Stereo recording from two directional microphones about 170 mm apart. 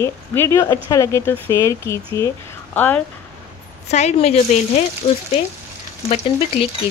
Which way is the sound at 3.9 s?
40° left (ahead or behind).